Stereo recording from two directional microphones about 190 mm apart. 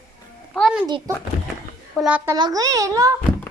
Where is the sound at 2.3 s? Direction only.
20° right (ahead or behind).